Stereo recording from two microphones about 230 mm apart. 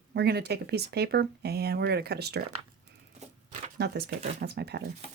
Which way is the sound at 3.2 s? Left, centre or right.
Right.